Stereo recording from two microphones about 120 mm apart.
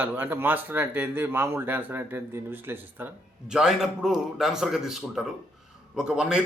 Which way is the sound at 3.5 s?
5° right (ahead or behind).